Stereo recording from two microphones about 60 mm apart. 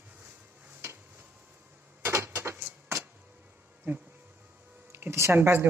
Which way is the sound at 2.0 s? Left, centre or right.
Right.